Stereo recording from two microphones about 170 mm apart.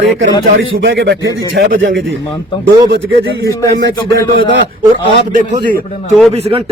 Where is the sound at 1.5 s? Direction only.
90° right.